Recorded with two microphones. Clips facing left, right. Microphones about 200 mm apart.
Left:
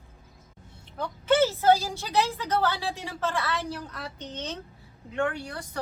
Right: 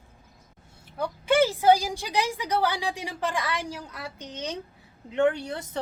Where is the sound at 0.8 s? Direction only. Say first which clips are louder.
Left 1 dB; 10° right (ahead or behind).